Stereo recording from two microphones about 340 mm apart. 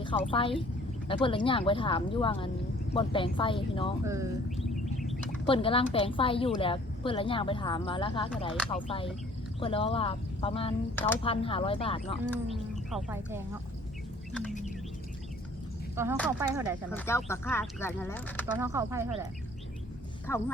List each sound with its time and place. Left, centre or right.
0.0 s a woman's voice: centre
4.0 s a sound: centre
5.5 s a woman's voice: centre
10.9 s a woman's voice: centre
12.5 s speech: centre
16.0 s speech: centre
16.9 s a woman's voice: centre
18.5 s speech: centre
20.3 s a woman's voice: centre